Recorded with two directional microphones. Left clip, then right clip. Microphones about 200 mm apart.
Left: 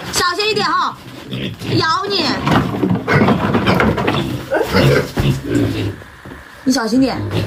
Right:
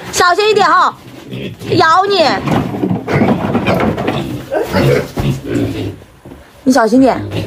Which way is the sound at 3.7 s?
Centre (ahead or behind).